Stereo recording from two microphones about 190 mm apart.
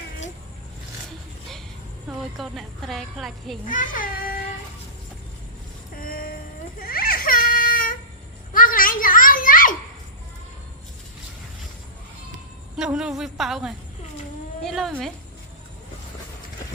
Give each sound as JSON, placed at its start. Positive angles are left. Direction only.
{"t": 2.0, "sound": "speech", "side_deg": 0}
{"t": 3.7, "sound": "a child's voice", "side_deg": 45}
{"t": 6.0, "sound": "baby cry", "side_deg": 50}
{"t": 8.5, "sound": "a sound", "side_deg": 45}
{"t": 12.7, "sound": "a sound", "side_deg": -5}
{"t": 14.6, "sound": "speech", "side_deg": 0}